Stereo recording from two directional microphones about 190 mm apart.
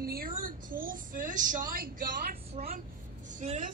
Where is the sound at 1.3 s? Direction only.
45° right (ahead or behind).